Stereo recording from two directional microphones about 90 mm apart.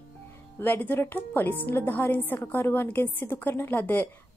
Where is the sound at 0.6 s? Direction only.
20° left (ahead or behind).